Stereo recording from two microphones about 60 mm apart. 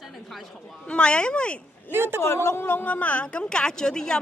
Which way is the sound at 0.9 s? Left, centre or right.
Centre.